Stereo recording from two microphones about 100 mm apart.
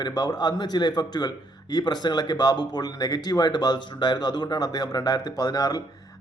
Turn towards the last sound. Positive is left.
turn(degrees=40)  # may be behind; listen again after turning